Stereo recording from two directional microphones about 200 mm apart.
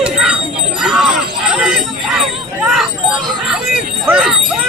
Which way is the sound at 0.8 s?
5° right (ahead or behind).